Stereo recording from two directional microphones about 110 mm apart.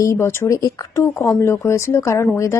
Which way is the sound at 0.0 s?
25° left (ahead or behind).